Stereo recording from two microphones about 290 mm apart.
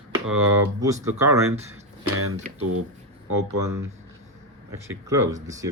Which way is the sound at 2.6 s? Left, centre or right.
Right.